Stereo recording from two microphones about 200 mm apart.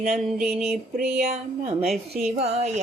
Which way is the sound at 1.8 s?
Centre (ahead or behind).